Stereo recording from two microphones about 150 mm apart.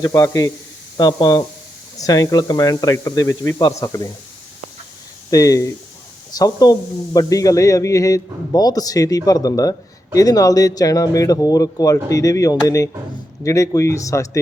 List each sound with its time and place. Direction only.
0.0 s a man's voice: 20° left (ahead or behind)
5.3 s a man's voice: 25° left (ahead or behind)